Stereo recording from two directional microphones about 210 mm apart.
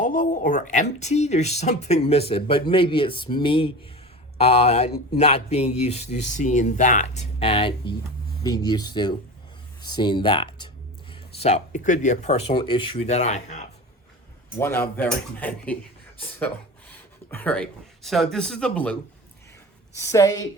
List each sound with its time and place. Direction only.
0.0 s speech: 40° left (ahead or behind)
14.6 s speech: 10° left (ahead or behind)
17.3 s a man's voice: 5° left (ahead or behind)
20.0 s speech: 15° left (ahead or behind)